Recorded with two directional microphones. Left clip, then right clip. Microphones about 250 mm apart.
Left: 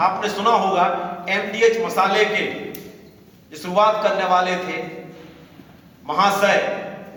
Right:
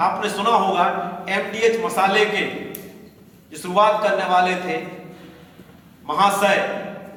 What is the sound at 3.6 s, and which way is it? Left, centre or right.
Speech, centre.